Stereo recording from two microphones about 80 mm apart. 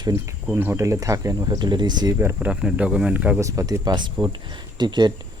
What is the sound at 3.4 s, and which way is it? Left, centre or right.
Speech, right.